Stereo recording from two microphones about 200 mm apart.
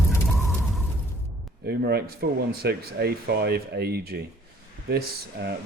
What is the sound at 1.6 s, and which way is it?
Speech, 55° right (ahead or behind).